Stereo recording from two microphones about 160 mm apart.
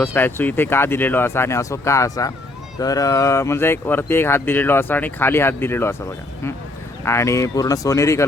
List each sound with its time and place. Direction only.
0.0 s speech: 10° left (ahead or behind)
7.0 s speech: 15° left (ahead or behind)